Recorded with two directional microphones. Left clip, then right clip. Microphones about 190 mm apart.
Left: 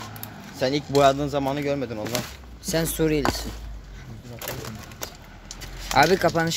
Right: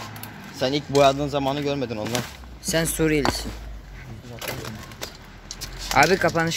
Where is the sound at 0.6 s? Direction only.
Centre (ahead or behind).